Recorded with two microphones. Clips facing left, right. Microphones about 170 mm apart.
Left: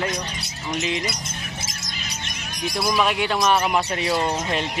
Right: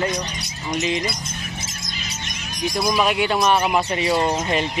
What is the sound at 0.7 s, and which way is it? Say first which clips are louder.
Speech: right 3 dB; centre (ahead or behind).